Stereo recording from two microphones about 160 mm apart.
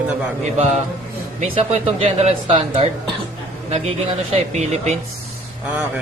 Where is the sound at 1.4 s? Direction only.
40° right (ahead or behind).